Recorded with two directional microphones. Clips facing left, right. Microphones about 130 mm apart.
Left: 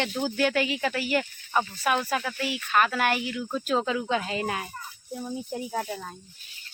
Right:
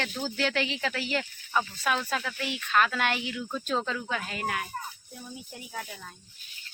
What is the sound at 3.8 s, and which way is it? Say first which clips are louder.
Speech: left 6 dB; 20° left (ahead or behind).